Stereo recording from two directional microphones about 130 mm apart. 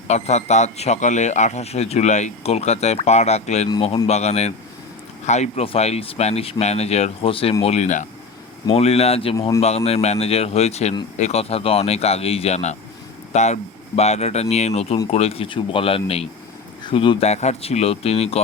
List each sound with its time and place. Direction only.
0.1 s a man's voice: 60° left (ahead or behind)
7.6 s a man's voice: 55° left (ahead or behind)
8.7 s a man's voice: 50° left (ahead or behind)
17.2 s speech: 60° left (ahead or behind)